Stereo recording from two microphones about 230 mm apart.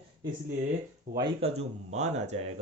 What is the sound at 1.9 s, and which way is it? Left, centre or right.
Speech, right.